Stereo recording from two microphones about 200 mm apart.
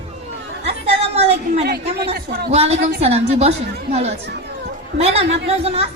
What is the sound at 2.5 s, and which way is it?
A woman's voice, 30° right (ahead or behind).